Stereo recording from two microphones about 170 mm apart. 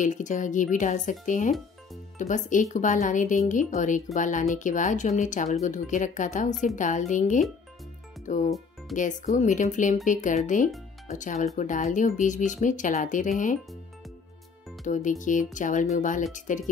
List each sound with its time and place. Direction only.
0.0 s speech: 45° left (ahead or behind)
14.9 s speech: 50° left (ahead or behind)